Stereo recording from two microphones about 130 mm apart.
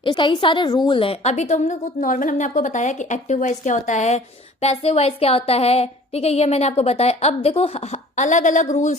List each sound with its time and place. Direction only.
0.0 s a woman's voice: 40° left (ahead or behind); by 4.2 s 65° left (ahead or behind)
4.6 s a woman's voice: 50° left (ahead or behind)
8.1 s speech: 70° left (ahead or behind)